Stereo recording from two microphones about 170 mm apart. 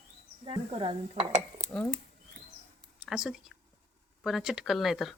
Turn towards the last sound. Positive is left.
turn(degrees=0)  # may be behind; listen again after turning